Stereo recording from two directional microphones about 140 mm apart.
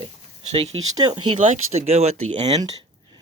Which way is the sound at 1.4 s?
60° right (ahead or behind).